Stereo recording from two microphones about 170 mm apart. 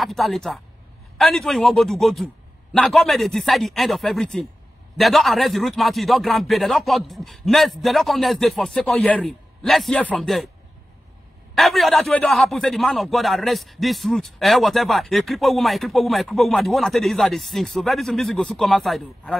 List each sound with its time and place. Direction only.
0.0 s a man's voice: centre (ahead or behind)
11.5 s a man's voice: centre (ahead or behind)